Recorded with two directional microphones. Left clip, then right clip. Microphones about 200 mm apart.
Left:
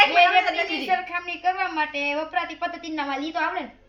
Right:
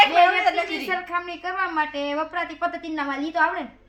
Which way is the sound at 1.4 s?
5° right (ahead or behind).